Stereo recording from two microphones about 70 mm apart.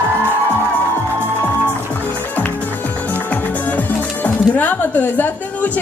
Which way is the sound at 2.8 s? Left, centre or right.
Left.